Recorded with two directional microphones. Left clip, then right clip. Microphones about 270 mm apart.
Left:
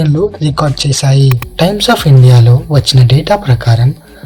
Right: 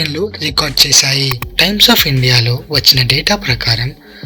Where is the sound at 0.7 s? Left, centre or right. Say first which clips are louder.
Right 6 dB; right.